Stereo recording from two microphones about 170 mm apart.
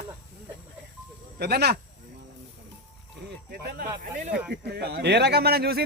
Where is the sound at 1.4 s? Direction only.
70° right (ahead or behind).